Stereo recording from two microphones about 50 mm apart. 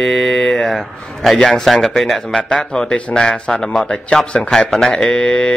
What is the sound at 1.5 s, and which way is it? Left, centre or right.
Speech, centre.